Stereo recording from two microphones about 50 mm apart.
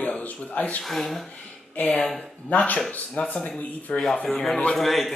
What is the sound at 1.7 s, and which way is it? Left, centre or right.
Speech, left.